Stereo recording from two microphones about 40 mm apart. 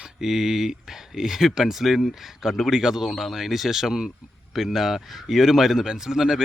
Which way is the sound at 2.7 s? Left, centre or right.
Centre.